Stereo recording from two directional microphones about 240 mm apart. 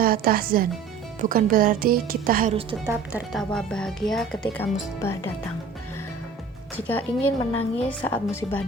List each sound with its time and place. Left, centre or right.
0.0 s a woman's voice: right
2.8 s speech: centre
6.7 s a woman's voice: centre